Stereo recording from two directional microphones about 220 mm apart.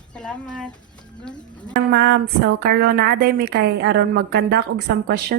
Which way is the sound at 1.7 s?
50° right (ahead or behind).